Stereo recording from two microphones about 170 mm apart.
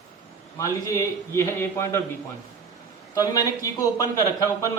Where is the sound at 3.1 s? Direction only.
20° left (ahead or behind).